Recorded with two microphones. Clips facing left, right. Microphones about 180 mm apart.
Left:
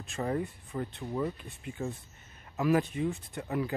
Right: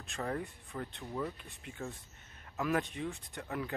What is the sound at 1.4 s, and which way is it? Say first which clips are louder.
Speech: left 6 dB; centre (ahead or behind).